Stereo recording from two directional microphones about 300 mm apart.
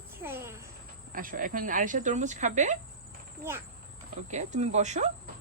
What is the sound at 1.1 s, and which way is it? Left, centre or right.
Speech, right.